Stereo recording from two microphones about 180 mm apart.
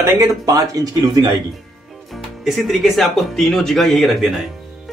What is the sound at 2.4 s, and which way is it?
Speech, centre (ahead or behind).